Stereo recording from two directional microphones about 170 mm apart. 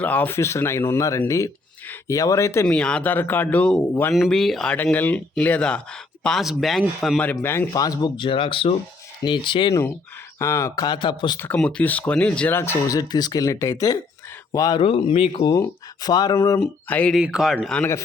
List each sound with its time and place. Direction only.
0.0 s speech: 10° left (ahead or behind)
2.6 s speech: 5° left (ahead or behind); by 9.7 s 30° left (ahead or behind)
10.3 s speech: 15° left (ahead or behind)
11.3 s speech: 10° left (ahead or behind)
14.8 s speech: 35° left (ahead or behind)
15.4 s speech: 25° left (ahead or behind)
16.6 s speech: 5° left (ahead or behind)
17.2 s speech: 5° right (ahead or behind)